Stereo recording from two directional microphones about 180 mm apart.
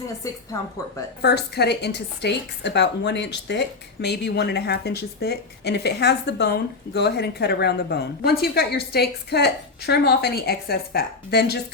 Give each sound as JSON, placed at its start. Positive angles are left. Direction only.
{"t": 0.2, "sound": "a woman's voice", "side_deg": 20}
{"t": 1.2, "sound": "a woman's voice", "side_deg": 65}